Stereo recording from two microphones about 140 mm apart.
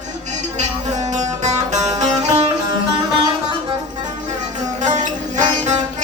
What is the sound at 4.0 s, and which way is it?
Music, 60° right (ahead or behind).